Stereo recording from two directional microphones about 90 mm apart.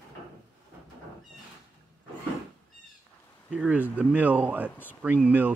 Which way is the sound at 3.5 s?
15° right (ahead or behind).